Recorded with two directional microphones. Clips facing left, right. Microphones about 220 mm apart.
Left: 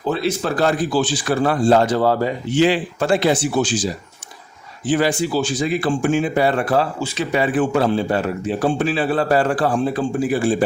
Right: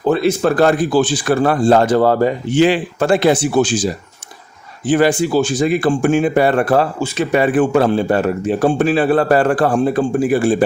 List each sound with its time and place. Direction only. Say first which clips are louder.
0.1 s speech: right 6 dB; 50° right (ahead or behind)
4.9 s speech: right 5 dB; 50° right (ahead or behind)